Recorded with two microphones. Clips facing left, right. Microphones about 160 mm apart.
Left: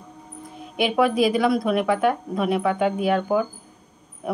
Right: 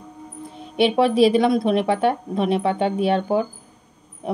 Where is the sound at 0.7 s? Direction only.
30° right (ahead or behind).